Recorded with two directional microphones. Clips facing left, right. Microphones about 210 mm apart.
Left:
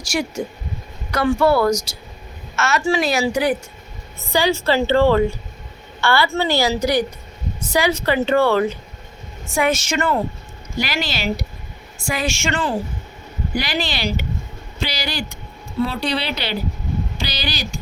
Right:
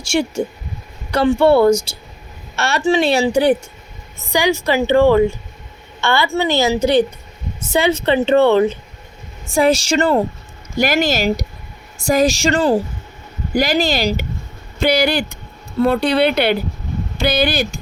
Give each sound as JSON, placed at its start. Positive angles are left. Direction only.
{"t": 0.0, "sound": "a woman's voice", "side_deg": -25}
{"t": 4.3, "sound": "a woman's voice", "side_deg": -15}
{"t": 10.8, "sound": "a woman's voice", "side_deg": -45}
{"t": 14.8, "sound": "speech", "side_deg": -55}